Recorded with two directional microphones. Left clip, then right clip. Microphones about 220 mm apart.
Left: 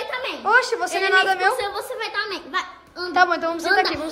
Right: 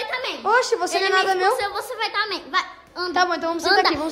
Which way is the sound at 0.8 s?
5° right (ahead or behind).